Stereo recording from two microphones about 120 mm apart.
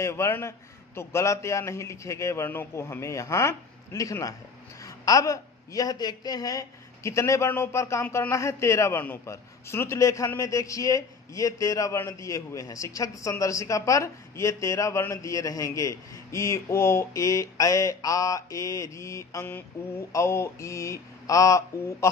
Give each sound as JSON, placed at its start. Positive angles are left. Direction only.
{"t": 0.0, "sound": "speech", "side_deg": 20}